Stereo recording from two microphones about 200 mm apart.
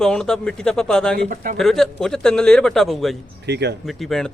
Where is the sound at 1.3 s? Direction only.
40° right (ahead or behind).